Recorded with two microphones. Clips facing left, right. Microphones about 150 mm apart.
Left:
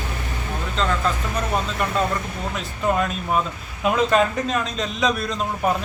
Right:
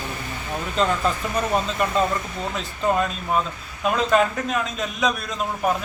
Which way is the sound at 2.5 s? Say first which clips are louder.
Even; centre (ahead or behind).